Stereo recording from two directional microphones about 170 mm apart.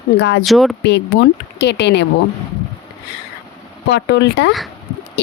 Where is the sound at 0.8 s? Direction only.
85° left.